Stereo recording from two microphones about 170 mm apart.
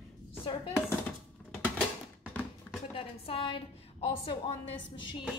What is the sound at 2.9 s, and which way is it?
A woman's voice, 30° left (ahead or behind).